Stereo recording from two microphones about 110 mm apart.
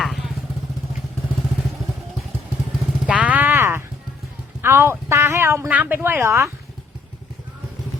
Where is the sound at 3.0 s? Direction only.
15° right (ahead or behind).